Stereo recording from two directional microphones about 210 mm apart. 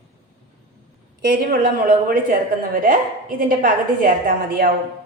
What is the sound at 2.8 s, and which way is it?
A woman's voice, 40° right (ahead or behind).